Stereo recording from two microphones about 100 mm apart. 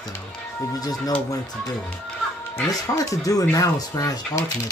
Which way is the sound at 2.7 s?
35° left (ahead or behind).